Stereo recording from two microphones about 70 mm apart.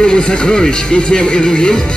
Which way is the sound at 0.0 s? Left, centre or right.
Centre.